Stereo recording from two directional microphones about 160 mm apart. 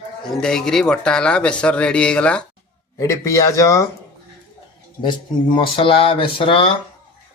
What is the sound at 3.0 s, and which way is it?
Speech, 20° left (ahead or behind).